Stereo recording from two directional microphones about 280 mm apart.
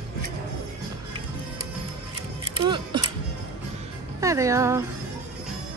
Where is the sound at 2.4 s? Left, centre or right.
Centre.